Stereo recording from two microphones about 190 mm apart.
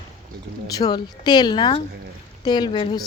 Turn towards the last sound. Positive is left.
turn(degrees=25)  # may be behind; listen again after turning